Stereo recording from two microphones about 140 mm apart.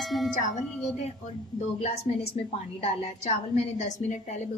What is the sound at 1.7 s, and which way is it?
A woman's voice, 50° left (ahead or behind).